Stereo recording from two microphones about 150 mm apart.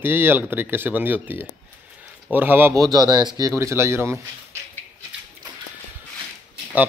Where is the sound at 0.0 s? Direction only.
15° right (ahead or behind).